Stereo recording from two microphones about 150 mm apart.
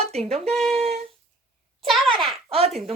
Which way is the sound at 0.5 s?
5° left (ahead or behind).